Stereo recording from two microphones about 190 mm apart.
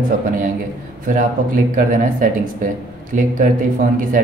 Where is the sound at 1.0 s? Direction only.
45° right (ahead or behind).